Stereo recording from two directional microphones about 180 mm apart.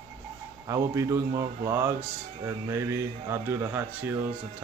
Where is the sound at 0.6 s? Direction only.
15° right (ahead or behind).